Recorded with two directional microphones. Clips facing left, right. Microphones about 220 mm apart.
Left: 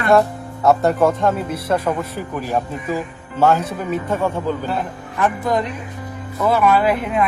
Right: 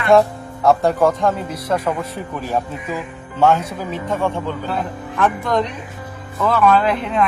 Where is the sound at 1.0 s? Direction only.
25° left (ahead or behind).